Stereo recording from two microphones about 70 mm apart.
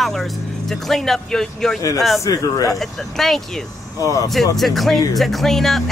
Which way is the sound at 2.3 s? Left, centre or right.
Left.